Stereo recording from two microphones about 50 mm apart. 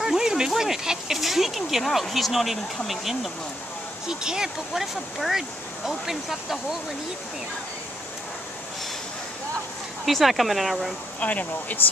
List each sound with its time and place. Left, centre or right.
0.0 s a sound: centre
0.6 s speech: centre
5.9 s speech: centre
10.0 s speech: centre
11.1 s speech: left